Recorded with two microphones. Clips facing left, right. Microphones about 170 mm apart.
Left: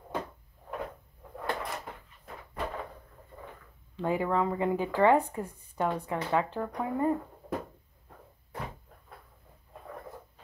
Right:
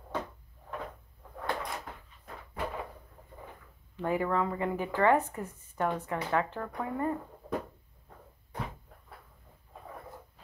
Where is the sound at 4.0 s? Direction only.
15° left (ahead or behind).